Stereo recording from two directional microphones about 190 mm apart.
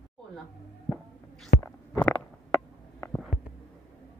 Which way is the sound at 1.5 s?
45° left (ahead or behind).